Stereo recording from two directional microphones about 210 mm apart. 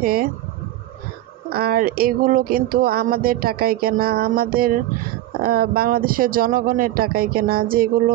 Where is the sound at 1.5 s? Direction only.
45° right (ahead or behind).